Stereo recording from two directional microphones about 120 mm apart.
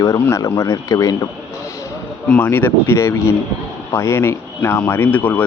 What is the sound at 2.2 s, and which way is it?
Speech, 15° left (ahead or behind).